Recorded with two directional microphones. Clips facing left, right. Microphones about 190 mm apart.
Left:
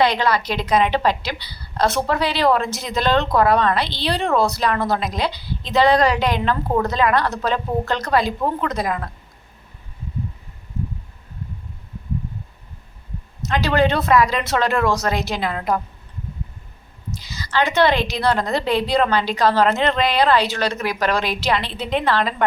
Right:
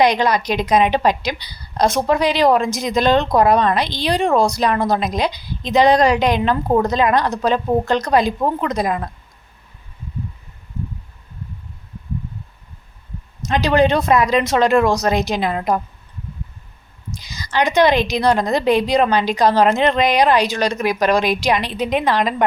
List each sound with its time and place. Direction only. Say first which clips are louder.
0.0 s a woman's voice: right 3 dB; 15° right (ahead or behind)
13.5 s a woman's voice: right 3 dB; 15° right (ahead or behind)
17.2 s a woman's voice: right 1 dB; 15° right (ahead or behind)